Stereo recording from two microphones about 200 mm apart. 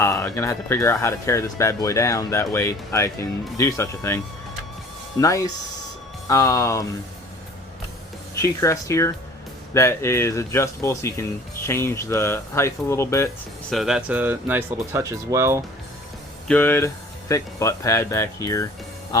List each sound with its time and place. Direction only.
0.0 s speech: 15° left (ahead or behind)
6.2 s speech: 15° left (ahead or behind)
8.4 s speech: 15° left (ahead or behind)
13.7 s speech: centre (ahead or behind)
16.5 s speech: 10° left (ahead or behind)